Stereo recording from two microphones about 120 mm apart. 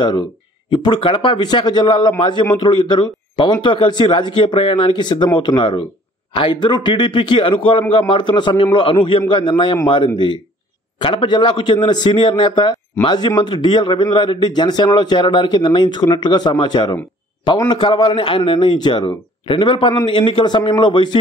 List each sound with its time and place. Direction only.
0.7 s a man's voice: 40° left (ahead or behind)